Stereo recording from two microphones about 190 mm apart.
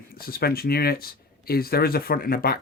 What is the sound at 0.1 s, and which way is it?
Speech, 50° left (ahead or behind).